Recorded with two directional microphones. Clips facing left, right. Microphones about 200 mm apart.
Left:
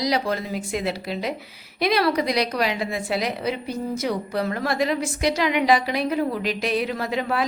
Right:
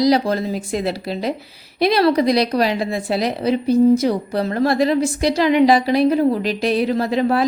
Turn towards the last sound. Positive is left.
turn(degrees=-35)  # may be behind; listen again after turning